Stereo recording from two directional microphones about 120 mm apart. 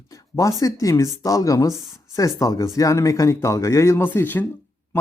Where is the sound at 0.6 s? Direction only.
25° left (ahead or behind).